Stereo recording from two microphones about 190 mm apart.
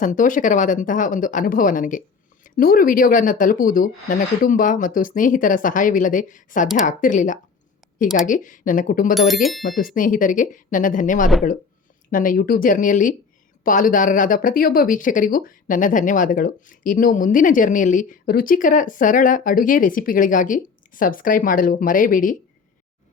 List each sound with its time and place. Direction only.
0.0 s speech: 40° left (ahead or behind)
9.1 s speech: centre (ahead or behind)
9.6 s speech: 45° left (ahead or behind)